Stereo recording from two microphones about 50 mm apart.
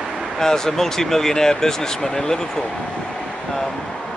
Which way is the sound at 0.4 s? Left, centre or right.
Centre.